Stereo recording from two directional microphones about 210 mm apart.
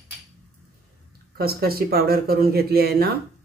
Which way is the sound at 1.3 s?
45° right (ahead or behind).